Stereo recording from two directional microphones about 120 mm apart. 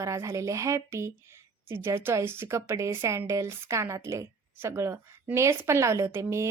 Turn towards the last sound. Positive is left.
turn(degrees=-25)  # may be behind; listen again after turning